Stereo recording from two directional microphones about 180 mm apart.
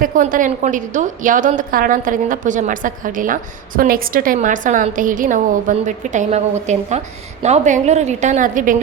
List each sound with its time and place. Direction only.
0.0 s a woman's voice: 50° right (ahead or behind)